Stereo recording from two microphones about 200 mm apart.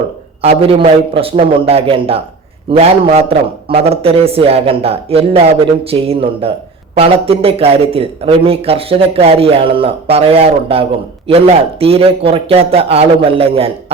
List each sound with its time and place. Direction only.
0.4 s speech: 30° right (ahead or behind)